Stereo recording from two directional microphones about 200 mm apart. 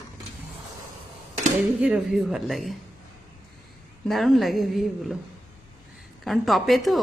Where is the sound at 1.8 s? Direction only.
5° right (ahead or behind).